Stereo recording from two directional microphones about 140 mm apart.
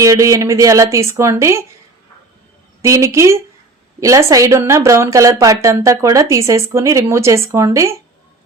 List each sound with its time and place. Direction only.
0.0 s speech: 20° right (ahead or behind)
2.8 s speech: 20° right (ahead or behind)